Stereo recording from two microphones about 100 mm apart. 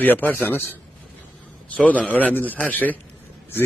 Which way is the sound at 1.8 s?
15° left (ahead or behind).